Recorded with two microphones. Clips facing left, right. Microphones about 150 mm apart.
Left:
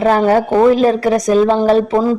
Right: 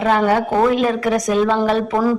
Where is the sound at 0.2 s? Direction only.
35° left (ahead or behind).